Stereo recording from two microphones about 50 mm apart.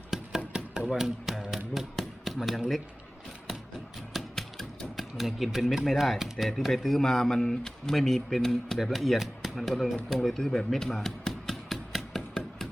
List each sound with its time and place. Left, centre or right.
0.1 s knock: centre
0.9 s a sound: centre
2.6 s speech: centre
4.1 s typewriter: centre
6.4 s speech: centre